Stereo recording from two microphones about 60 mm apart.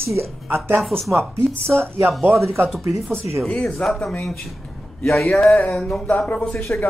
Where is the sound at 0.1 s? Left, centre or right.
Right.